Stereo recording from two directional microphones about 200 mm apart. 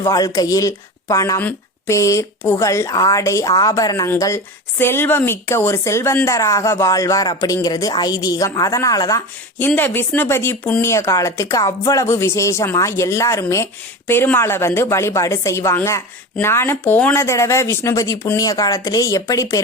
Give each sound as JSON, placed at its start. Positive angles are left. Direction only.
{"t": 0.0, "sound": "speech", "side_deg": 15}